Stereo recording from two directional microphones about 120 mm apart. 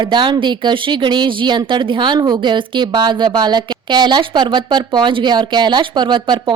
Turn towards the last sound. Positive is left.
turn(degrees=-45)  # may be behind; listen again after turning